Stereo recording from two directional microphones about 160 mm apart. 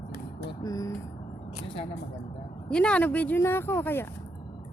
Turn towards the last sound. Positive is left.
turn(degrees=15)  # may be behind; listen again after turning